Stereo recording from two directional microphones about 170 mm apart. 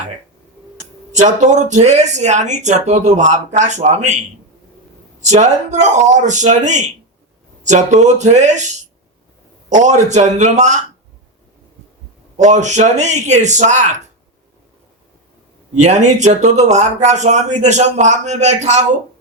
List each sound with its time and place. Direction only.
1.1 s speech: 45° right (ahead or behind)
5.3 s speech: 45° right (ahead or behind)
12.4 s speech: 45° right (ahead or behind)
15.7 s speech: 45° right (ahead or behind)